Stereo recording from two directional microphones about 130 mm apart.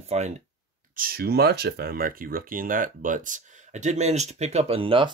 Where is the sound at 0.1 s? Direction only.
55° right (ahead or behind).